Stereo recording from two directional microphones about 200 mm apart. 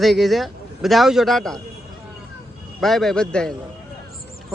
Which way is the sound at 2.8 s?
Centre (ahead or behind).